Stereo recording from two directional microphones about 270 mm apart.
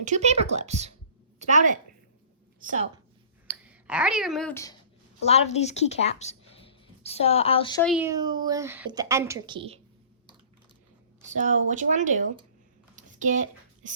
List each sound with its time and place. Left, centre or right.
0.0 s a woman's voice: right
3.4 s speech: centre
5.2 s speech: left
7.8 s speech: centre
11.3 s speech: right
13.0 s a sound: right